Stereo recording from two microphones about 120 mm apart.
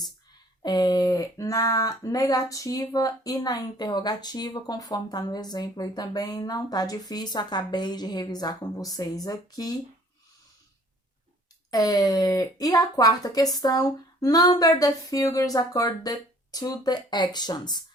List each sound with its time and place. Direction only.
0.6 s speech: 35° left (ahead or behind)
11.7 s speech: 30° left (ahead or behind)